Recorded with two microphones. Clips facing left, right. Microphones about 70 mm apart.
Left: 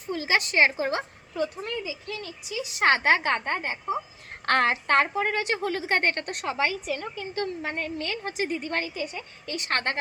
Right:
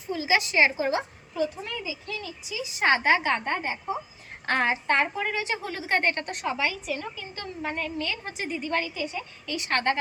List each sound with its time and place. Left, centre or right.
0.1 s a woman's voice: left
4.4 s a woman's voice: left